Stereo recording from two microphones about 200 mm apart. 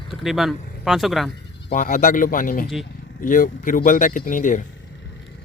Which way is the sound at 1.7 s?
40° left (ahead or behind).